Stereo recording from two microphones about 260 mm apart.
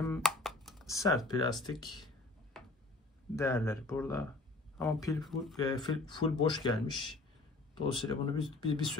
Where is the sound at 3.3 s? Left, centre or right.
Centre.